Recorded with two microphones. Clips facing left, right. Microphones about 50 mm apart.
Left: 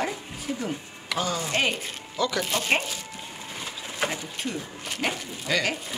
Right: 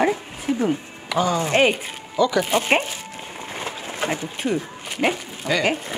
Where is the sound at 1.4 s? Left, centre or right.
Right.